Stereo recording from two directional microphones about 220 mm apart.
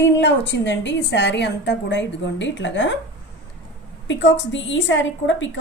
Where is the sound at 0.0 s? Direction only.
55° left (ahead or behind).